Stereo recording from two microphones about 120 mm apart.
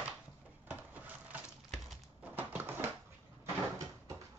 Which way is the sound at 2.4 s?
15° right (ahead or behind).